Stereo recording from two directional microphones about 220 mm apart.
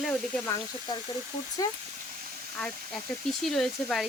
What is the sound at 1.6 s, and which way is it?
Speech, 15° left (ahead or behind).